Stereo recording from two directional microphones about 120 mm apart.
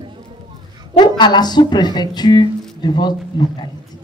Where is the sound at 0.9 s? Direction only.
35° left (ahead or behind).